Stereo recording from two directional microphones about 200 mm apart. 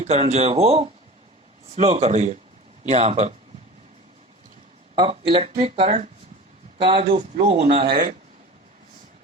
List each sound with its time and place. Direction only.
0.0 s speech: 35° right (ahead or behind)
4.9 s speech: 25° right (ahead or behind)
7.9 s speech: 45° right (ahead or behind)